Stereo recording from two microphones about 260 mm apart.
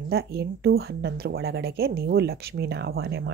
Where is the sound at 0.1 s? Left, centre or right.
Right.